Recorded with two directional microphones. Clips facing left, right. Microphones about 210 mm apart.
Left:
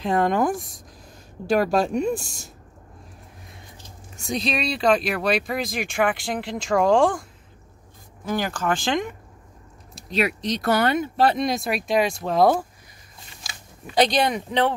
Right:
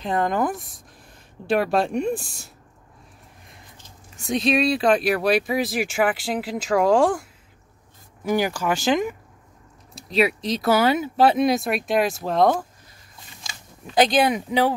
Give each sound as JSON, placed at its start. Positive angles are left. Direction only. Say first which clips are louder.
{"t": 0.5, "sound": "speech", "louder": "left 4 dB", "side_deg": 45}
{"t": 1.5, "sound": "speech", "louder": "left 1 dB", "side_deg": 0}
{"t": 4.3, "sound": "speech", "louder": "right 5 dB", "side_deg": 0}
{"t": 8.3, "sound": "speech", "louder": "right 2 dB", "side_deg": -10}